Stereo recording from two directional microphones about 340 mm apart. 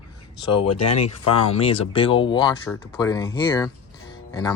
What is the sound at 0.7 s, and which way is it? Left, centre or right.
Speech, left.